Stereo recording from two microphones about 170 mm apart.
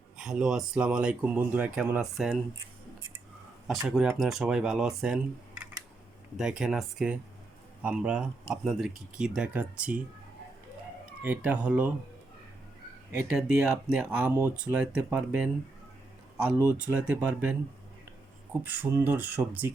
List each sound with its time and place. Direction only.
0.2 s speech: 5° right (ahead or behind)
3.8 s speech: 5° right (ahead or behind)
11.2 s speech: 10° right (ahead or behind)
13.1 s speech: 5° right (ahead or behind)
16.7 s speech: 10° right (ahead or behind)
18.6 s speech: 10° right (ahead or behind)